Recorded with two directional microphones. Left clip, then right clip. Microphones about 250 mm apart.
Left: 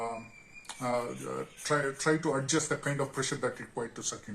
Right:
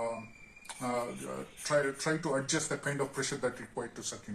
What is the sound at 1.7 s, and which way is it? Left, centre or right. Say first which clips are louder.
Speech: left 1 dB; left.